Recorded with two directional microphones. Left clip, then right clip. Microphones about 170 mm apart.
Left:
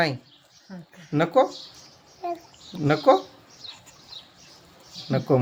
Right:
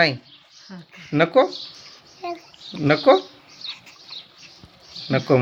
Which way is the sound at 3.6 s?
90° left.